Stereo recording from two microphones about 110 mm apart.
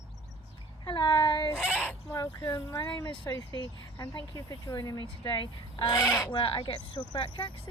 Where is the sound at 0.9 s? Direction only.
45° left (ahead or behind).